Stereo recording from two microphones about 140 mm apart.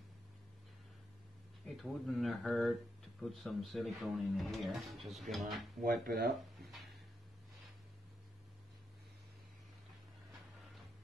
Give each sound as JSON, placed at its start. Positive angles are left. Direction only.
{"t": 1.8, "sound": "speech", "side_deg": 0}
{"t": 5.8, "sound": "speech", "side_deg": -90}